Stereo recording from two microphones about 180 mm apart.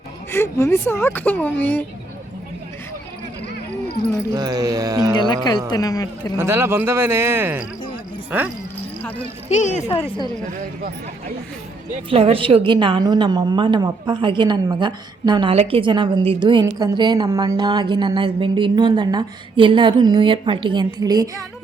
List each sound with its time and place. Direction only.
0.3 s speech: 15° left (ahead or behind)
4.4 s a woman's voice: 20° right (ahead or behind)
5.2 s a woman's voice: 25° left (ahead or behind)
6.3 s speech: 15° right (ahead or behind)
9.5 s a woman's voice: 40° left (ahead or behind)
12.1 s a woman's voice: 30° right (ahead or behind)